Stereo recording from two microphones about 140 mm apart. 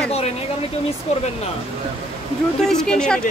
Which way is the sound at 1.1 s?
50° left (ahead or behind).